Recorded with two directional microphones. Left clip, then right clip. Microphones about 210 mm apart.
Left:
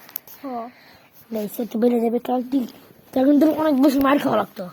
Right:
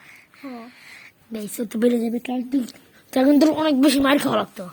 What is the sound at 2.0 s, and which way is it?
Speech, 20° left (ahead or behind).